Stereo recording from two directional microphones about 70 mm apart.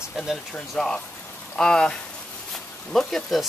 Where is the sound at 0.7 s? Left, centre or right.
Centre.